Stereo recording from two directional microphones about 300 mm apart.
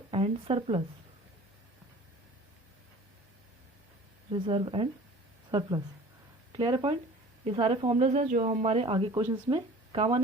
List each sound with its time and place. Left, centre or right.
0.1 s speech: centre
4.3 s speech: centre